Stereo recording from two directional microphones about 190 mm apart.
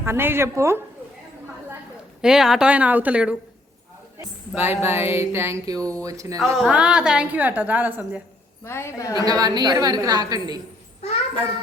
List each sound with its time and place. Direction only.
0.0 s a woman's voice: 10° right (ahead or behind)
2.2 s a woman's voice: 5° right (ahead or behind)
6.4 s a woman's voice: 5° right (ahead or behind)
8.6 s a woman's voice: 15° left (ahead or behind)
9.1 s a woman's voice: 20° right (ahead or behind)